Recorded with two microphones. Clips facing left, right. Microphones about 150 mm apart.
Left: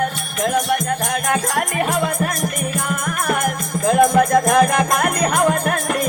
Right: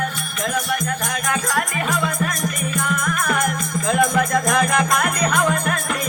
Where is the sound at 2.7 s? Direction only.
45° left (ahead or behind).